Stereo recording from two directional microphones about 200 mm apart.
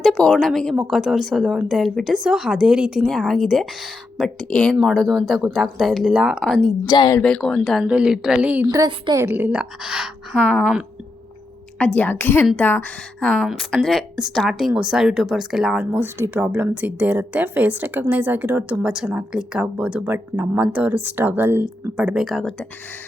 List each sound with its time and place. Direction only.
0.0 s a woman's voice: centre (ahead or behind)
6.7 s speech: 20° left (ahead or behind)
7.2 s a woman's voice: 5° left (ahead or behind)
8.6 s a woman's voice: 20° right (ahead or behind); by 10.8 s 5° right (ahead or behind)
11.9 s a woman's voice: 10° left (ahead or behind)